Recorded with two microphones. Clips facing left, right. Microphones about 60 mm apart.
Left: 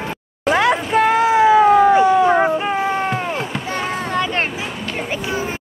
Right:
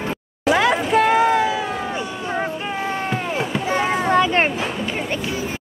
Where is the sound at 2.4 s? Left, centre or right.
Left.